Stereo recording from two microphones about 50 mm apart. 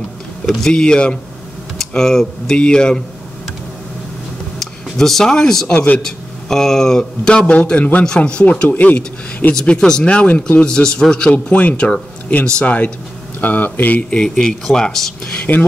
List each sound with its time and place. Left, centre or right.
0.7 s a man's voice: centre
1.8 s a man's voice: centre
4.6 s a man's voice: centre; by 8.6 s left
8.6 s speech: left
9.5 s speech: centre
10.0 s a man's voice: left
14.1 s speech: centre
15.5 s a man's voice: left